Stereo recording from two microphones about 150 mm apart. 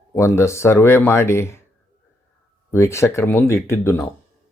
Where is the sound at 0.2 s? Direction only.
20° left (ahead or behind).